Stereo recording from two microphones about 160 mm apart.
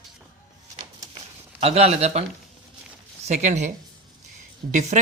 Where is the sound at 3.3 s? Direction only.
45° right (ahead or behind).